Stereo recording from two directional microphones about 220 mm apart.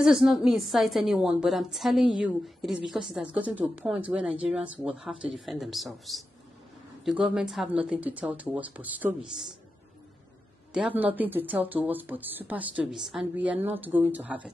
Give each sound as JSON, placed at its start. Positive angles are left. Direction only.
{"t": 0.0, "sound": "a woman's voice", "side_deg": 0}
{"t": 10.7, "sound": "speech", "side_deg": -5}